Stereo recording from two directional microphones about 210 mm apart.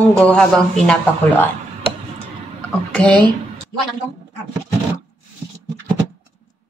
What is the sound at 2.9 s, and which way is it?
Speech, 5° left (ahead or behind).